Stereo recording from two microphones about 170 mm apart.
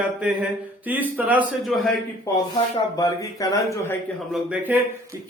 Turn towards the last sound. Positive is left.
turn(degrees=-5)  # may be behind; listen again after turning